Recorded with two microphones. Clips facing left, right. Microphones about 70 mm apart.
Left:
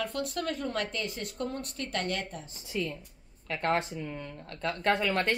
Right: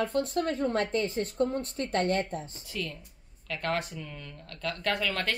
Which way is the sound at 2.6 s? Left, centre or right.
Left.